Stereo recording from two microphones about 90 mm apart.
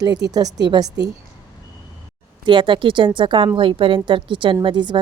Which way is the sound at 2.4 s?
65° right (ahead or behind).